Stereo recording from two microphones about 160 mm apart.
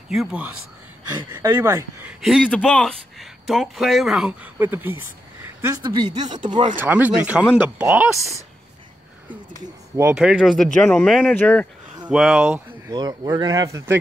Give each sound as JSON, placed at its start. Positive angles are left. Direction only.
{"t": 0.1, "sound": "a man's voice", "side_deg": -5}
{"t": 1.0, "sound": "speech", "side_deg": -20}
{"t": 2.2, "sound": "a man's voice", "side_deg": 5}
{"t": 6.8, "sound": "speech", "side_deg": -10}
{"t": 9.6, "sound": "speech", "side_deg": -20}
{"t": 10.1, "sound": "a man's voice", "side_deg": -5}
{"t": 11.1, "sound": "a man's voice", "side_deg": -5}
{"t": 11.3, "sound": "speech", "side_deg": 10}
{"t": 12.1, "sound": "a man's voice", "side_deg": 0}
{"t": 12.4, "sound": "a sound", "side_deg": -10}
{"t": 12.9, "sound": "speech", "side_deg": -25}